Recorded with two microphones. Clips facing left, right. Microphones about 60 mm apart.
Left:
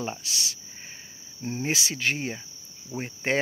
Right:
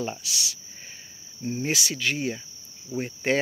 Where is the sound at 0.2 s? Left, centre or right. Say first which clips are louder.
Even; left.